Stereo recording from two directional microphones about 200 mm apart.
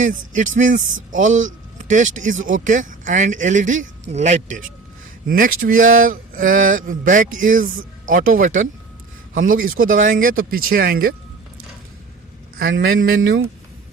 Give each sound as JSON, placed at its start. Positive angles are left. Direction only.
{"t": 0.0, "sound": "speech", "side_deg": -40}
{"t": 12.5, "sound": "a man's voice", "side_deg": -80}
{"t": 13.2, "sound": "speech", "side_deg": -70}